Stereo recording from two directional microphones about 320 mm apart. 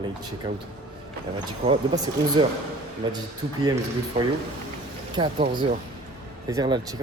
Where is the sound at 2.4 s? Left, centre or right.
Centre.